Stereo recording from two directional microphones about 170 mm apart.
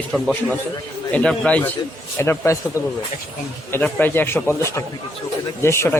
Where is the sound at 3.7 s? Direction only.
10° left (ahead or behind).